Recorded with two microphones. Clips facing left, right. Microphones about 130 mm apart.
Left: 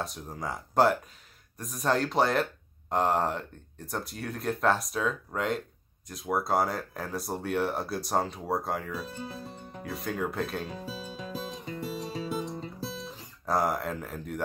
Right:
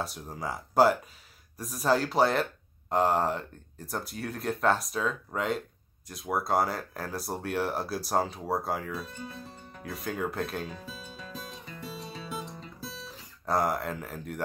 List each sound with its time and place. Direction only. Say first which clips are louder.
0.0 s speech: even; centre (ahead or behind)
9.0 s speech: left 3 dB; 35° left (ahead or behind)
9.4 s music: left 4 dB; 20° left (ahead or behind)
9.8 s speech: left 1 dB; centre (ahead or behind)
10.8 s speech: left 5 dB; 35° left (ahead or behind)
11.1 s music: left 5 dB; 30° left (ahead or behind)
13.5 s speech: even; centre (ahead or behind)